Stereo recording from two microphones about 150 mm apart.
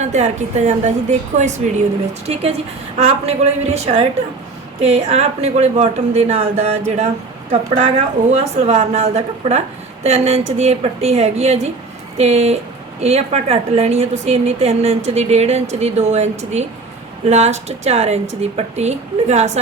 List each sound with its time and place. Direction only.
0.0 s a woman's voice: 50° right (ahead or behind)
2.2 s a woman's voice: 45° right (ahead or behind)